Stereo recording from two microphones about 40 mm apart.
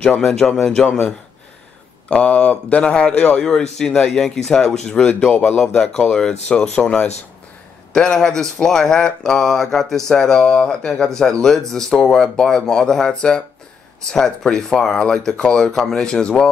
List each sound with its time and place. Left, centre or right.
0.2 s speech: centre
0.8 s speech: left
2.0 s a man's voice: left
3.4 s a man's voice: centre
5.3 s a man's voice: left
5.6 s a man's voice: centre
14.5 s a man's voice: centre